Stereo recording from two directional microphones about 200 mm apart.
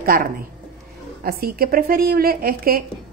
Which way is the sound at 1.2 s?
50° right (ahead or behind).